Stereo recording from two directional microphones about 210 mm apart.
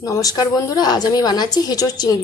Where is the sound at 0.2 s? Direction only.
20° left (ahead or behind).